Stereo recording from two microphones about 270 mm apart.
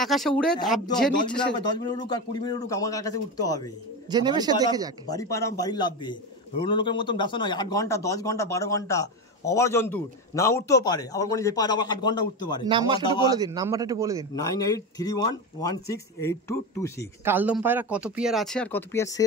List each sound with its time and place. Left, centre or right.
0.0 s speech: centre
1.5 s speech: centre
4.1 s a man's voice: centre
5.0 s speech: centre
12.6 s a man's voice: centre
14.3 s speech: centre
17.2 s speech: centre